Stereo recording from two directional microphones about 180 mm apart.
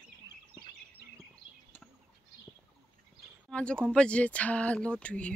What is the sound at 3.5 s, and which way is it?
Speech, 5° left (ahead or behind).